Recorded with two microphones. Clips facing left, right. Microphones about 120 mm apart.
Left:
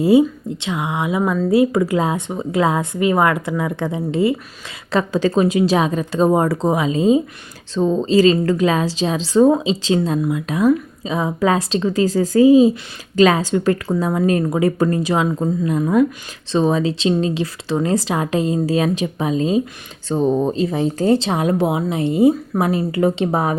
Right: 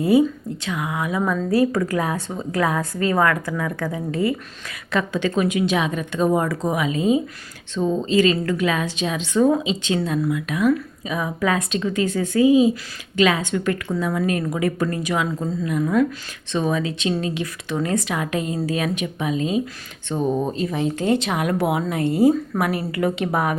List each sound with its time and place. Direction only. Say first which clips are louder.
0.0 s a woman's voice: left 4 dB; 25° left (ahead or behind)
4.9 s a woman's voice: left 5 dB; 35° left (ahead or behind)